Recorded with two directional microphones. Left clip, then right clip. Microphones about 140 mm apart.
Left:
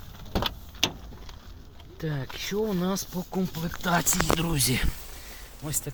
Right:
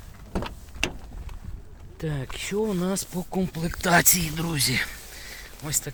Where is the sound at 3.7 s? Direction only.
90° right.